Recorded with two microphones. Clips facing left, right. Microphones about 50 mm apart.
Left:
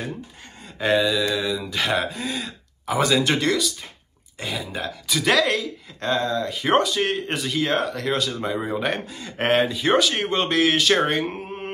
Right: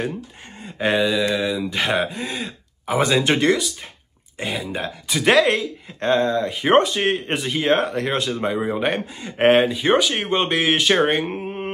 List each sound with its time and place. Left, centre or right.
0.7 s speech: right
11.3 s mantra: right